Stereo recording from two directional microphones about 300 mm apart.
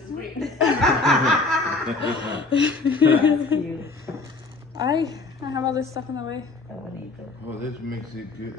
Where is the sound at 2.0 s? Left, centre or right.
Centre.